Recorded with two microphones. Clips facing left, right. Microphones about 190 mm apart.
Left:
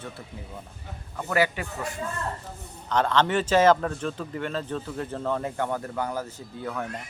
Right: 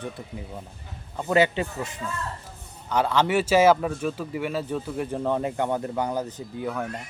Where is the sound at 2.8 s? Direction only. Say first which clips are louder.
Right 1 dB; 10° right (ahead or behind).